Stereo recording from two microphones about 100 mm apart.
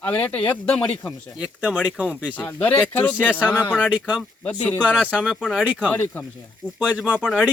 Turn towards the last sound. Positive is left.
turn(degrees=-10)  # may be behind; listen again after turning